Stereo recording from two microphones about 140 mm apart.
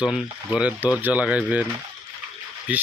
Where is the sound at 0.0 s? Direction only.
5° right (ahead or behind).